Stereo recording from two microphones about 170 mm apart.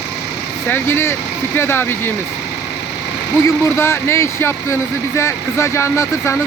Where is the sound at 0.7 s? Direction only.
15° left (ahead or behind).